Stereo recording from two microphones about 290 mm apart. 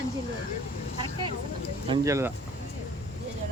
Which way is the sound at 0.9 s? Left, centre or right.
Centre.